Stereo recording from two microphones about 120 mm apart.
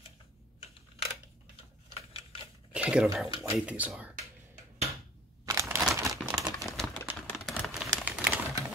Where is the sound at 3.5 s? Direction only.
10° right (ahead or behind).